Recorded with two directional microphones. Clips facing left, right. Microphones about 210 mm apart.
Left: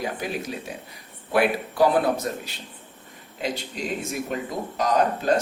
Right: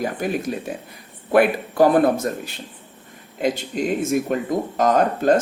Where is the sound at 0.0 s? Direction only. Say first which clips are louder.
Right 6 dB; 50° right (ahead or behind).